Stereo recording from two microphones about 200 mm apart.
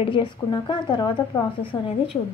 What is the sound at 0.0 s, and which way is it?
A woman's voice, 25° left (ahead or behind).